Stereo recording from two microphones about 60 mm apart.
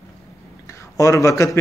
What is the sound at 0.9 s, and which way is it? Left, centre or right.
Speech, left.